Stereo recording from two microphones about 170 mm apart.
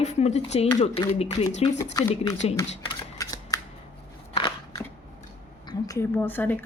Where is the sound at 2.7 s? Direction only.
30° left (ahead or behind).